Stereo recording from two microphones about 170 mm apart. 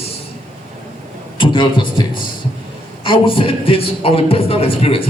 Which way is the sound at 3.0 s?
30° left (ahead or behind).